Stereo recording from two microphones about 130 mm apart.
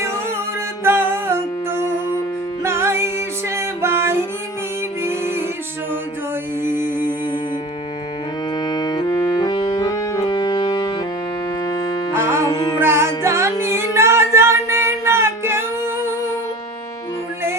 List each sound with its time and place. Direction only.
0.9 s music: 20° right (ahead or behind)
8.5 s music: 30° left (ahead or behind)
12.1 s music: 20° right (ahead or behind)
12.5 s music: 30° left (ahead or behind)
12.8 s music: 20° right (ahead or behind)